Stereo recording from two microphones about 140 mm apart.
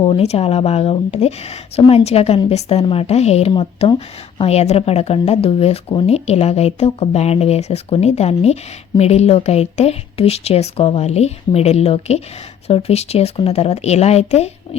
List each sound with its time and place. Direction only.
0.0 s a woman's voice: 45° left (ahead or behind)